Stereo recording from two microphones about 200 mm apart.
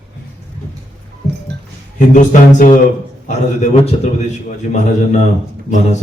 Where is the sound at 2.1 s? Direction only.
40° left (ahead or behind).